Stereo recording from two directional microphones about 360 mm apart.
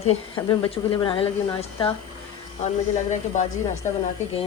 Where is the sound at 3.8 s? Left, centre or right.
Centre.